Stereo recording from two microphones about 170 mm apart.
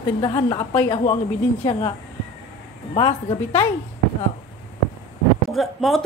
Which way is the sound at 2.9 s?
35° left (ahead or behind).